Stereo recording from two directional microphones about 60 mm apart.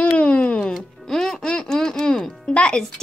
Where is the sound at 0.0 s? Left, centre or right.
Left.